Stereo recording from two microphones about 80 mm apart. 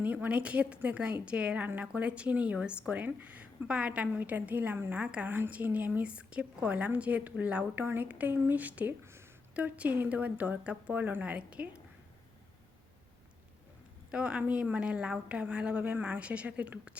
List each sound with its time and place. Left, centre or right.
0.0 s a woman's voice: right
9.6 s a woman's voice: centre
14.1 s a woman's voice: centre